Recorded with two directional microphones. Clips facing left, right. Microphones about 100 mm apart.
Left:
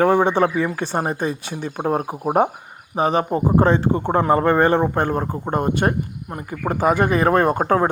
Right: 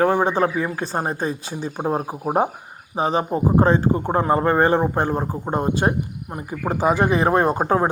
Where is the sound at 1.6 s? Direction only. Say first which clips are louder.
Left 2 dB; 65° left (ahead or behind).